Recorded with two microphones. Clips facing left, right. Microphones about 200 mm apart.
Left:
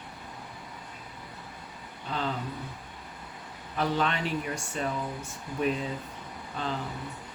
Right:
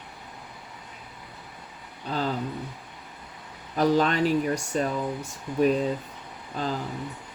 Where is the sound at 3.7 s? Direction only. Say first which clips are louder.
Right 7 dB; 40° right (ahead or behind).